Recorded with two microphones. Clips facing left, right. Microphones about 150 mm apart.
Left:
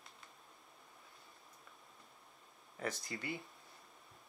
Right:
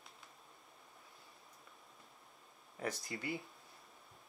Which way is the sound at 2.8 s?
15° right (ahead or behind).